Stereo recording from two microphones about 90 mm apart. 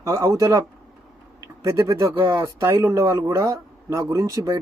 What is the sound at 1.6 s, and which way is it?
Speech, 35° right (ahead or behind).